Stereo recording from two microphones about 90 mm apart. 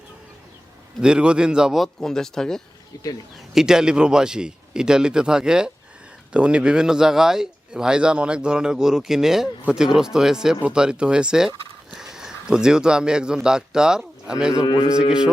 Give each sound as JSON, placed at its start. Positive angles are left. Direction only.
{"t": 1.0, "sound": "a man's voice", "side_deg": -10}
{"t": 2.9, "sound": "a man's voice", "side_deg": 45}
{"t": 3.5, "sound": "a man's voice", "side_deg": -5}
{"t": 14.5, "sound": "a man's voice", "side_deg": 45}